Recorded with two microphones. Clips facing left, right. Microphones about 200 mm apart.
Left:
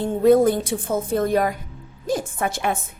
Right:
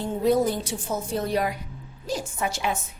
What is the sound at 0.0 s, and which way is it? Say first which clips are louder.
A woman's voice: left 7 dB; 55° left (ahead or behind).